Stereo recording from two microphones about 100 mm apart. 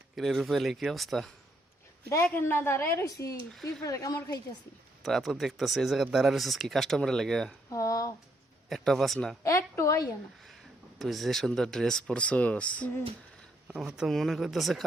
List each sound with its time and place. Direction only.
0.2 s speech: centre (ahead or behind)
2.0 s a woman's voice: 30° left (ahead or behind)
5.0 s speech: centre (ahead or behind)
7.7 s speech: 35° left (ahead or behind)
8.7 s speech: 5° left (ahead or behind)
9.4 s a woman's voice: 30° left (ahead or behind)
10.9 s speech: centre (ahead or behind)
13.7 s speech: 5° right (ahead or behind)